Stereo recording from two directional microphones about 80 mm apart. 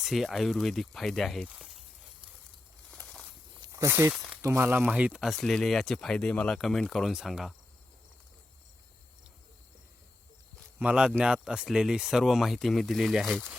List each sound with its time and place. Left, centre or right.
0.0 s speech: centre
1.5 s speech: centre
2.9 s a sound: centre
3.7 s speech: right
4.1 s speech: centre
4.5 s speech: right
4.9 s speech: centre
5.2 s speech: centre
10.8 s speech: centre